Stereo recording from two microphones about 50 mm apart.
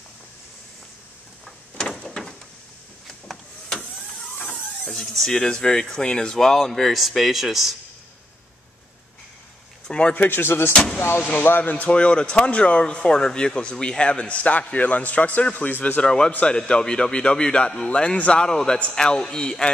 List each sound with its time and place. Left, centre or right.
1.8 s door: centre
4.5 s a sound: centre
5.3 s speech: centre
9.8 s speech: left
10.1 s speech: left
10.7 s speech: left
11.4 s speech: left
16.0 s speech: centre
18.4 s speech: centre